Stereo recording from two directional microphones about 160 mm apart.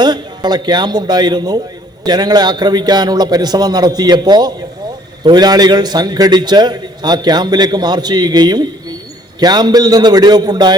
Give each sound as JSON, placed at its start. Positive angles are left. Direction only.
{"t": 0.0, "sound": "a man's voice", "side_deg": -25}